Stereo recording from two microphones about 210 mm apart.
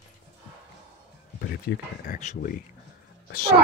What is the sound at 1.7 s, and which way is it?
Speech, 45° left (ahead or behind).